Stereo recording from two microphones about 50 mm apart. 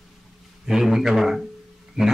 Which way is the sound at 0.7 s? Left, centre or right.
Centre.